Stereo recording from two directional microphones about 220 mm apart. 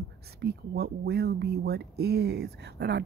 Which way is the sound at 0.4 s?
50° right (ahead or behind).